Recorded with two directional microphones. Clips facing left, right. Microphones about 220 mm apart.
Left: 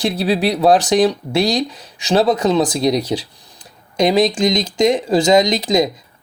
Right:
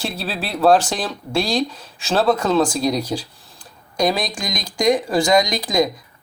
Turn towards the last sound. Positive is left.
turn(degrees=20)  # may be behind; listen again after turning